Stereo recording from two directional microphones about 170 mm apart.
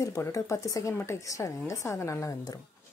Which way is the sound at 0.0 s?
20° left (ahead or behind).